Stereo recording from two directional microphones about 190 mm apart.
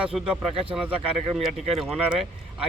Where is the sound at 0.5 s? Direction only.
30° right (ahead or behind).